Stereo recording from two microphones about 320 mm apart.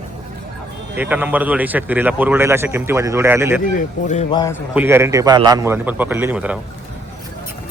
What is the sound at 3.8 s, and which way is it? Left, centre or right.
Speech, left.